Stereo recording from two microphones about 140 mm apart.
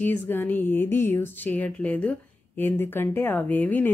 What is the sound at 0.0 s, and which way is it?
A woman's voice, 15° left (ahead or behind).